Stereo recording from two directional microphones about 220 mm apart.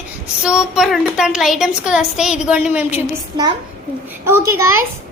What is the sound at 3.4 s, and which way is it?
A child's voice, 20° right (ahead or behind).